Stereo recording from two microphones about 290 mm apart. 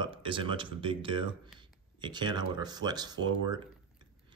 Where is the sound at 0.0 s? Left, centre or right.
Centre.